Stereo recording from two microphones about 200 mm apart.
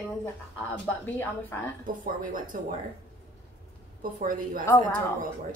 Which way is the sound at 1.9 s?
45° right (ahead or behind).